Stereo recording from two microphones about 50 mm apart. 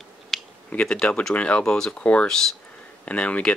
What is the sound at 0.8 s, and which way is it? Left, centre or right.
Speech, centre.